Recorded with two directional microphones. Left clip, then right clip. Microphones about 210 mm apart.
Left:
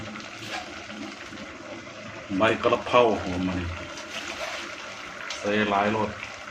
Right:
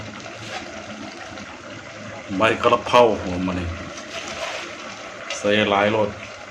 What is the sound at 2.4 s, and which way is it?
Speech, 10° right (ahead or behind).